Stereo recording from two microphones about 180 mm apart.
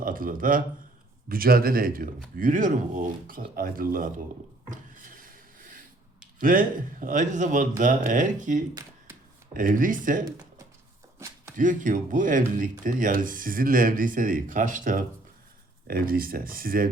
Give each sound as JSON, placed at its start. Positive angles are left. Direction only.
{"t": 0.0, "sound": "a man's voice", "side_deg": -50}
{"t": 4.7, "sound": "a sound", "side_deg": -50}
{"t": 6.4, "sound": "speech", "side_deg": -50}
{"t": 11.5, "sound": "speech", "side_deg": -45}